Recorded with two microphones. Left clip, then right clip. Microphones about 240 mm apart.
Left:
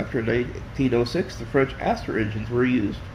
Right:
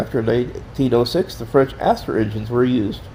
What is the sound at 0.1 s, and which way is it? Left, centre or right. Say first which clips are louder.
Speech: right 5 dB; right.